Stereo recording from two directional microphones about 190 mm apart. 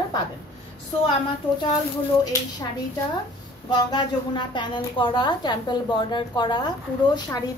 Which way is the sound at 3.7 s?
25° left (ahead or behind).